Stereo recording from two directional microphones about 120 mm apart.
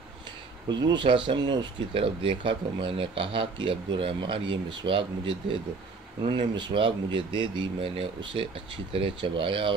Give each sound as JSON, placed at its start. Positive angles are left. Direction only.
{"t": 0.7, "sound": "speech", "side_deg": -35}